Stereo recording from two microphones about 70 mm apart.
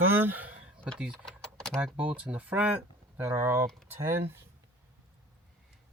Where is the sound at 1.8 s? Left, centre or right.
Right.